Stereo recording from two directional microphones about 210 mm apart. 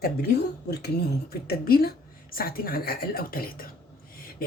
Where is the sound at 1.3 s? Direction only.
45° left (ahead or behind).